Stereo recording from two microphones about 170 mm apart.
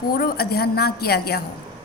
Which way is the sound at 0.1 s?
60° left (ahead or behind).